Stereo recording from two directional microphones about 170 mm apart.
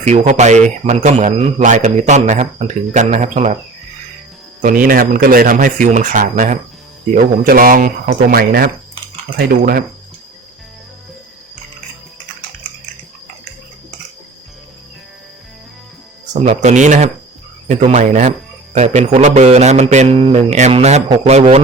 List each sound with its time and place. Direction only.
0.0 s a man's voice: 40° right (ahead or behind)
4.6 s a man's voice: 55° right (ahead or behind)
16.3 s a man's voice: 40° right (ahead or behind)